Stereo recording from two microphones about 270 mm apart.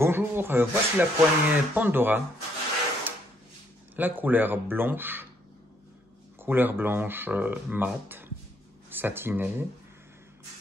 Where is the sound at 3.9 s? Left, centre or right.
Centre.